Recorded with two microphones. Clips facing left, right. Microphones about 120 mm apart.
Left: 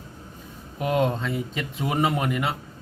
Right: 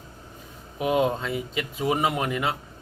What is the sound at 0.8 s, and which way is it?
Speech, 5° right (ahead or behind).